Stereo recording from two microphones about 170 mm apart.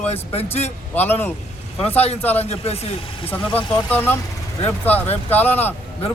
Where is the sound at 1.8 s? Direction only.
35° left (ahead or behind).